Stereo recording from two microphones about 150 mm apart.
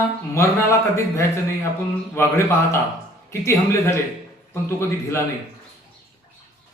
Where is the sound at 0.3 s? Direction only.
20° left (ahead or behind).